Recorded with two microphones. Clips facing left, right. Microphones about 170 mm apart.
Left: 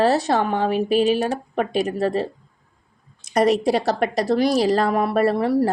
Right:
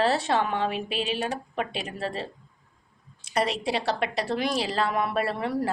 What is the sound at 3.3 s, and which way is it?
A woman's voice, 45° left (ahead or behind).